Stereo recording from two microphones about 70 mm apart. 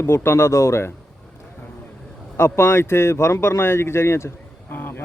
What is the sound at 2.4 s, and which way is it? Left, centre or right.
Speech, left.